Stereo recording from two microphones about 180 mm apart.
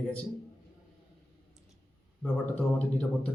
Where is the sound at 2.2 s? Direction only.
5° left (ahead or behind).